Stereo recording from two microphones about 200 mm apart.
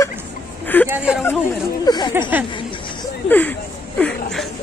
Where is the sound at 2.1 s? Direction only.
10° right (ahead or behind).